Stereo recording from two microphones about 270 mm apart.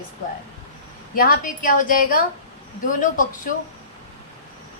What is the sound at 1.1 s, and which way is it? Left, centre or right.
A woman's voice, left.